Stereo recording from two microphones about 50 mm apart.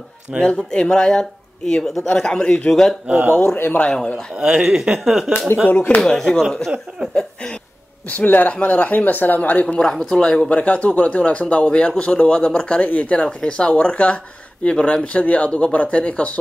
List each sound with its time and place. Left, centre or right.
0.4 s speech: centre
3.4 s speech: left
3.8 s speech: left
4.4 s speech: centre
5.7 s speech: left
5.9 s speech: centre
8.1 s speech: left
9.8 s speech: centre
10.5 s speech: left